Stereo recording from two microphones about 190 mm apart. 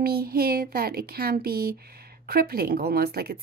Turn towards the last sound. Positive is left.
turn(degrees=-55)  # may be behind; listen again after turning